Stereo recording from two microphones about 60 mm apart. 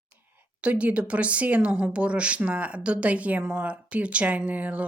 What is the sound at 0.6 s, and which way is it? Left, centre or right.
Speech, right.